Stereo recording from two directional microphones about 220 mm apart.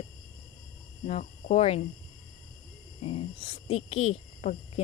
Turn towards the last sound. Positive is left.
turn(degrees=30)  # may be behind; listen again after turning